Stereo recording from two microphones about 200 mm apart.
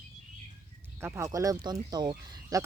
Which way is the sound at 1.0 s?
10° right (ahead or behind).